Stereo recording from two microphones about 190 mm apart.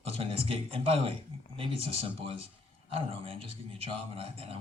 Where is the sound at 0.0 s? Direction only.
30° right (ahead or behind).